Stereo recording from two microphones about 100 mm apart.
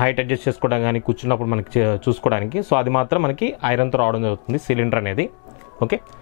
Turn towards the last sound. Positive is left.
turn(degrees=20)  # may be behind; listen again after turning